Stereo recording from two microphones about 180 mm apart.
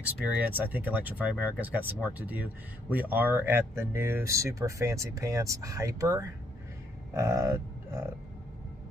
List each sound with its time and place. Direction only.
0.2 s speech: 10° right (ahead or behind)
7.2 s livestock: 15° right (ahead or behind)